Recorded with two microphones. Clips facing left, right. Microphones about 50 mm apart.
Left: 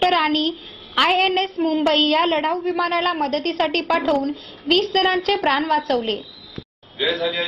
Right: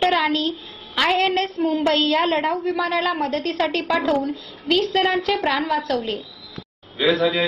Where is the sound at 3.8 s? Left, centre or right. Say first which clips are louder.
Left 1 dB; left.